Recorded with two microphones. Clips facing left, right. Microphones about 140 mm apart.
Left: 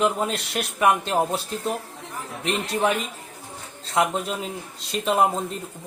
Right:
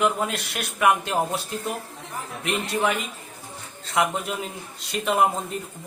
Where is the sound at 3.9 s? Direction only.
30° left (ahead or behind).